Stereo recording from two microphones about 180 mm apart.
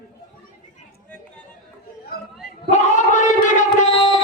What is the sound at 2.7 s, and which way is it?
Gargling, 45° left (ahead or behind).